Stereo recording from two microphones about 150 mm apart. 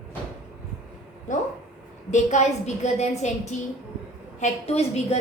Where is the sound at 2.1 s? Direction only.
50° left (ahead or behind).